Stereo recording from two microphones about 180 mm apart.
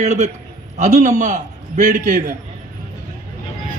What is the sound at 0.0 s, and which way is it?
A man's voice, 40° right (ahead or behind).